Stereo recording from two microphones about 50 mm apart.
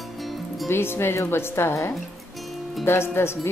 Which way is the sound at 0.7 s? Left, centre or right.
Left.